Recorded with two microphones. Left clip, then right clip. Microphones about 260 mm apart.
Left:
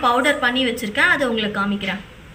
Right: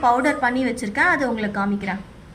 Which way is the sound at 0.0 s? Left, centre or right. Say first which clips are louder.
Left 1 dB; centre.